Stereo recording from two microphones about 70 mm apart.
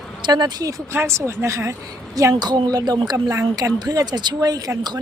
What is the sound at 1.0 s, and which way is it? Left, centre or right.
Speech, right.